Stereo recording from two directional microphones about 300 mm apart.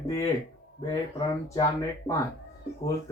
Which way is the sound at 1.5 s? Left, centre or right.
Centre.